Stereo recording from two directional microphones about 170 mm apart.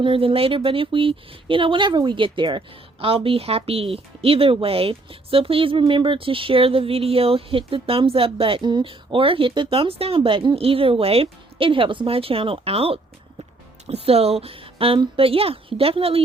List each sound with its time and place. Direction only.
0.0 s speech: 30° right (ahead or behind)